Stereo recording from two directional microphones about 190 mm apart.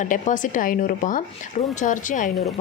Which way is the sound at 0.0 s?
40° left (ahead or behind).